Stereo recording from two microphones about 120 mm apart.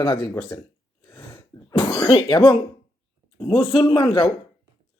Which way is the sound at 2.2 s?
35° left (ahead or behind).